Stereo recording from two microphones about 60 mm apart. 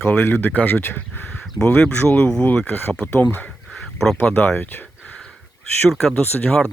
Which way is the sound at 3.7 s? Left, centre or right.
Centre.